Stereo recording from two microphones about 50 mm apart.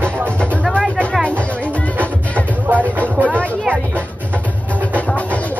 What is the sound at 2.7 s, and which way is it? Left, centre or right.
Music, right.